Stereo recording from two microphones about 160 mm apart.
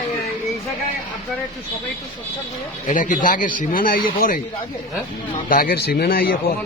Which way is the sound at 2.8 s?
55° left (ahead or behind).